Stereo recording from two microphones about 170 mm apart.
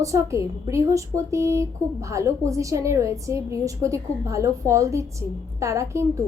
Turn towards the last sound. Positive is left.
turn(degrees=-15)  # may be behind; listen again after turning